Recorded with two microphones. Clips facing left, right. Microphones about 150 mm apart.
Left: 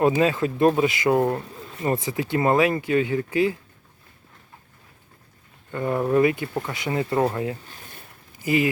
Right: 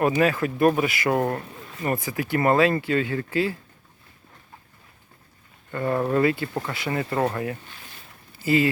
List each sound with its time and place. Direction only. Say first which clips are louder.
0.0 s speech: left 1 dB; 20° left (ahead or behind)
5.7 s speech: left 2 dB; 15° left (ahead or behind)
6.7 s speech: left 3 dB; 20° left (ahead or behind)
8.4 s speech: right 1 dB; 15° left (ahead or behind)